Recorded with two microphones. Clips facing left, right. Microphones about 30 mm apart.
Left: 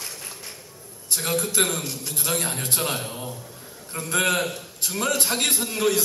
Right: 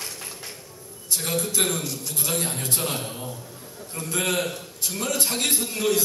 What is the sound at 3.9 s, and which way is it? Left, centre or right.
Speech, left.